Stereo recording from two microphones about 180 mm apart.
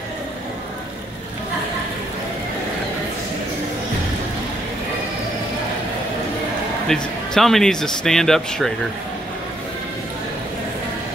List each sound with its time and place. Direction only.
6.9 s speech: 5° left (ahead or behind)